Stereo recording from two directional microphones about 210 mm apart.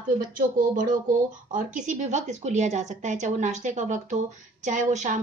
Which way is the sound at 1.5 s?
35° right (ahead or behind).